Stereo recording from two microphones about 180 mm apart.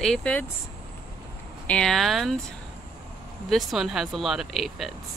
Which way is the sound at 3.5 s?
Centre (ahead or behind).